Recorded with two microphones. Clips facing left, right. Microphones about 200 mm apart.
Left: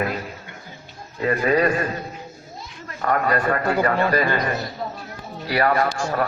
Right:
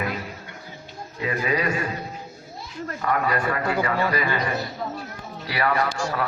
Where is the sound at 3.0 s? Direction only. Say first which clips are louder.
Left 3 dB; 50° left (ahead or behind).